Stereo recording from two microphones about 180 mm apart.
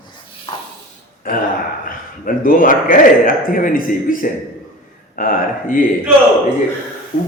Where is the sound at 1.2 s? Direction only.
50° left (ahead or behind).